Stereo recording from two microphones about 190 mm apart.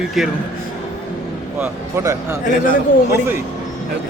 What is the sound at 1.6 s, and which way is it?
Speech, 15° right (ahead or behind).